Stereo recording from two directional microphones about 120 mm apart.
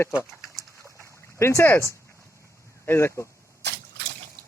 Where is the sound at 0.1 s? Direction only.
10° right (ahead or behind).